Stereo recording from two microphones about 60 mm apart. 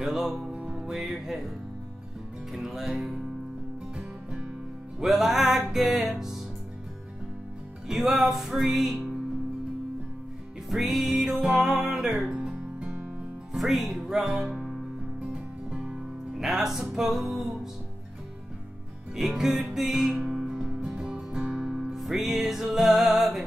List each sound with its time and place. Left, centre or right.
0.0 s music: centre
0.5 s music: centre
0.7 s music: centre
2.5 s music: centre
5.0 s music: centre
7.9 s music: centre
10.7 s music: centre
19.1 s music: centre